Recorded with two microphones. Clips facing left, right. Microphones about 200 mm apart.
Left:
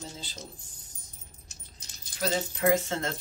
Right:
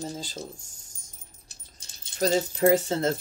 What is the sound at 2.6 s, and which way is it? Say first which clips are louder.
Speech: right 4 dB; 35° right (ahead or behind).